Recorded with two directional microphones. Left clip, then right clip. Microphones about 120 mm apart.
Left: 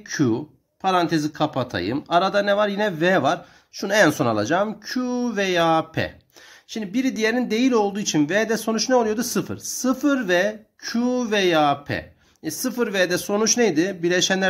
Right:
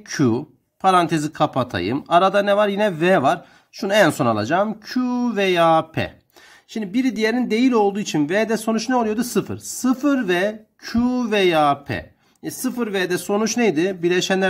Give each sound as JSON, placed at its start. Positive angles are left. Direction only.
{"t": 0.0, "sound": "speech", "side_deg": -45}
{"t": 12.4, "sound": "speech", "side_deg": -25}